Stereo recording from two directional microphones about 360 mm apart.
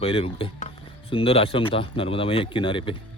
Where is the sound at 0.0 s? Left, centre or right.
Centre.